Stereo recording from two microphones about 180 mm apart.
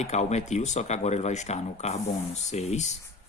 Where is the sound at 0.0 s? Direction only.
40° left (ahead or behind).